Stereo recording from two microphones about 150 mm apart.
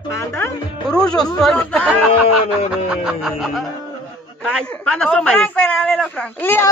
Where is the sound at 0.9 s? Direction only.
5° left (ahead or behind).